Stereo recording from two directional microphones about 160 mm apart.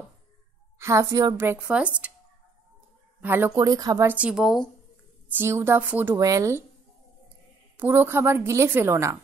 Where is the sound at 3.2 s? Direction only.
15° right (ahead or behind).